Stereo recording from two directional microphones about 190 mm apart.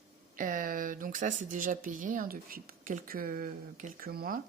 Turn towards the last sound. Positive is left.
turn(degrees=-50)  # may be behind; listen again after turning